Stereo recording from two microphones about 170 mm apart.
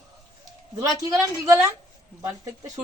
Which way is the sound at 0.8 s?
20° right (ahead or behind).